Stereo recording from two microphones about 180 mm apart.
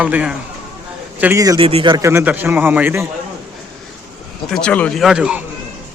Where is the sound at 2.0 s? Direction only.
10° right (ahead or behind).